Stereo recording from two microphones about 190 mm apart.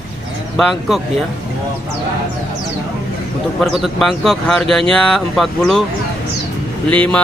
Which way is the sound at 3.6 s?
Centre (ahead or behind).